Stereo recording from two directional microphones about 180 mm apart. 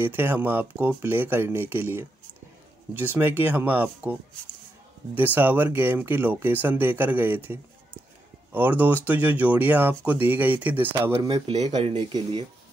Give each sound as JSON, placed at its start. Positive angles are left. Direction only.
{"t": 0.0, "sound": "speech", "side_deg": -10}
{"t": 3.2, "sound": "speech", "side_deg": -10}